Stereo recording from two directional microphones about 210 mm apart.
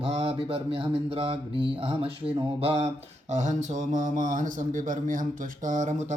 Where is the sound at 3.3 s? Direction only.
35° right (ahead or behind).